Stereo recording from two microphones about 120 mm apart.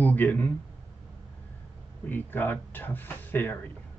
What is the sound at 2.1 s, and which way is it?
Speech, 15° left (ahead or behind).